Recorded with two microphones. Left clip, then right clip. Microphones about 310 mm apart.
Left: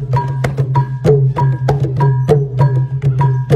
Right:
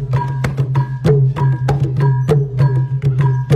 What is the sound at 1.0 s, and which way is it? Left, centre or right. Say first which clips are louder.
Music: left 4 dB; centre.